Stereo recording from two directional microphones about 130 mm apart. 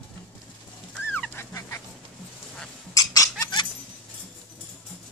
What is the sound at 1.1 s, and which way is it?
Dog, 15° left (ahead or behind).